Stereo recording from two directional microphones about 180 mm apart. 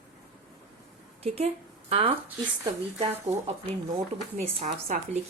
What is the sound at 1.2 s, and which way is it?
Speech, 35° right (ahead or behind).